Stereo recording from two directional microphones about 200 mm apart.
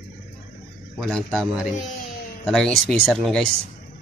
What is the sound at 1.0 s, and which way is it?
Speech, centre (ahead or behind).